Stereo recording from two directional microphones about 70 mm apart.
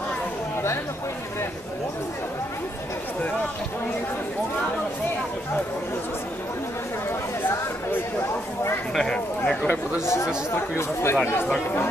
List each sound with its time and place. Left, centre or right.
7.4 s a sound: left
8.9 s speech: centre
9.5 s a man's voice: centre
10.0 s speech: left